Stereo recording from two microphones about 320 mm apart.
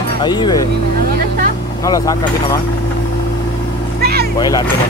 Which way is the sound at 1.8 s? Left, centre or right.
Centre.